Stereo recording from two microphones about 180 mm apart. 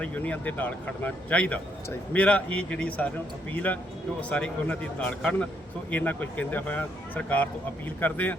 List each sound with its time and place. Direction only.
0.0 s speech: 10° left (ahead or behind)